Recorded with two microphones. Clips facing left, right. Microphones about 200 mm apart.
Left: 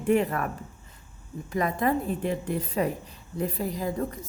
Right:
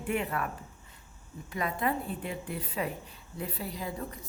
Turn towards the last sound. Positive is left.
turn(degrees=45)  # may be behind; listen again after turning